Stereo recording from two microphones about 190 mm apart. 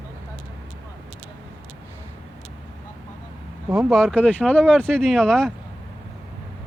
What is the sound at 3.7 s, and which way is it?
Speech, centre (ahead or behind).